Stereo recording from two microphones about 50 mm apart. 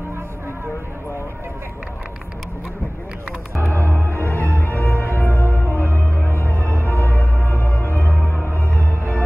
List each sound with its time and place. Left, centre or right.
3.9 s music: left
8.5 s music: right